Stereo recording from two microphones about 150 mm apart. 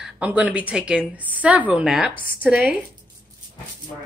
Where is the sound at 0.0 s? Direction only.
10° right (ahead or behind).